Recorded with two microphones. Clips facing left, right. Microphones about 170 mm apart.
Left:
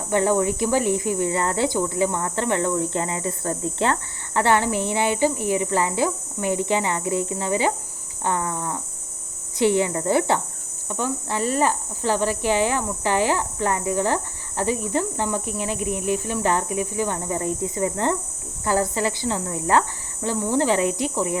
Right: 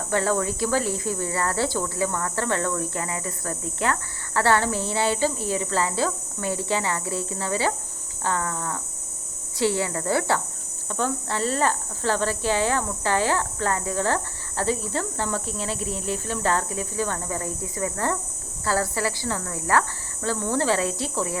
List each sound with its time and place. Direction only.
0.1 s speech: 20° left (ahead or behind)